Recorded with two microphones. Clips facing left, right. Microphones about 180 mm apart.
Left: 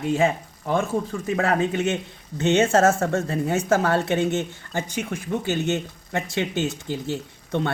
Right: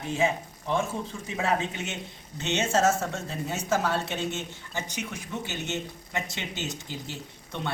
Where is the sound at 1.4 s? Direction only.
60° left (ahead or behind).